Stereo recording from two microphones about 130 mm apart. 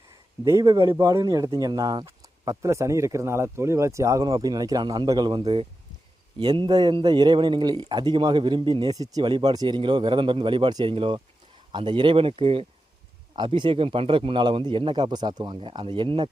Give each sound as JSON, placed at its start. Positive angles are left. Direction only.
{"t": 0.4, "sound": "speech", "side_deg": -25}
{"t": 6.4, "sound": "a man's voice", "side_deg": -35}